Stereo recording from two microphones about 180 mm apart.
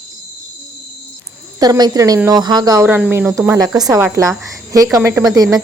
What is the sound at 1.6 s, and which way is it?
A woman's voice, 20° right (ahead or behind).